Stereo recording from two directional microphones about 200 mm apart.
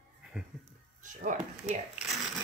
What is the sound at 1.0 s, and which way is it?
Music, 40° right (ahead or behind).